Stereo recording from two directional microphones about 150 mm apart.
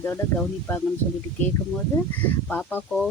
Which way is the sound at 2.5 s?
10° left (ahead or behind).